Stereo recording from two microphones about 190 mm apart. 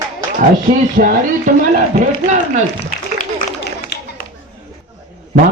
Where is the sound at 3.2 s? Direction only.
55° left (ahead or behind).